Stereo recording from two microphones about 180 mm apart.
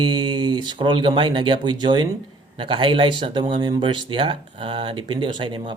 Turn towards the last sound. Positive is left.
turn(degrees=-25)  # may be behind; listen again after turning